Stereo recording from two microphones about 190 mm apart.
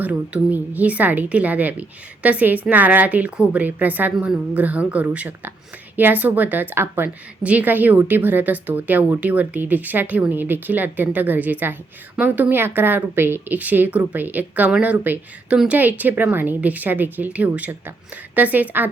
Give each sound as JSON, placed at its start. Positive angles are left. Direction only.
{"t": 0.0, "sound": "a woman's voice", "side_deg": -10}